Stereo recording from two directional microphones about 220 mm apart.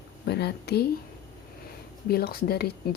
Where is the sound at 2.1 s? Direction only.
45° left (ahead or behind).